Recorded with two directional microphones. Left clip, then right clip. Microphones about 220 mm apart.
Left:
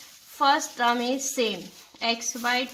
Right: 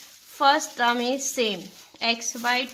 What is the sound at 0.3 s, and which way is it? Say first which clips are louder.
A woman's voice: right 2 dB; 35° right (ahead or behind).